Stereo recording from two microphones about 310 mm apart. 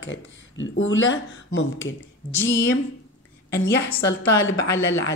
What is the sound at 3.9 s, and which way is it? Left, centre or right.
Speech, left.